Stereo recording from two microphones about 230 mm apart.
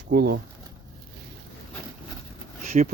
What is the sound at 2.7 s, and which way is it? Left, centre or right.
Speech, right.